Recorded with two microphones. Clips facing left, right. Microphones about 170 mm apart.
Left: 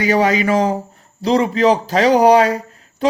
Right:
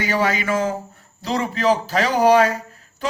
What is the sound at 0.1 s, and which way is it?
Speech, 40° left (ahead or behind).